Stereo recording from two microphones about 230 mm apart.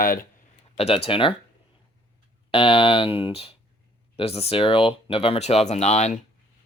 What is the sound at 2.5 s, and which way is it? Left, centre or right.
Speech, left.